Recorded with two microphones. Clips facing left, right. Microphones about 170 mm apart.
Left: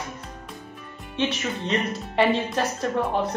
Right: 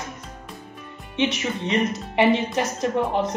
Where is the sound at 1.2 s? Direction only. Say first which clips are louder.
Right 2 dB; 20° right (ahead or behind).